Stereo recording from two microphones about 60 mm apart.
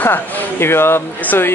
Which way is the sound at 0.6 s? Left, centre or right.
Left.